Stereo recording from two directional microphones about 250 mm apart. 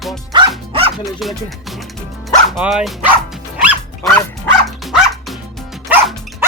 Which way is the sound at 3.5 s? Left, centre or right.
Centre.